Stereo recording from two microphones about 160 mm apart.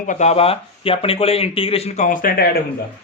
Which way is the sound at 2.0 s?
60° left (ahead or behind).